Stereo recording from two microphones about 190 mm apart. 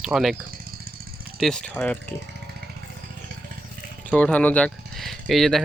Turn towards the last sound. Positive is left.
turn(degrees=0)  # may be behind; listen again after turning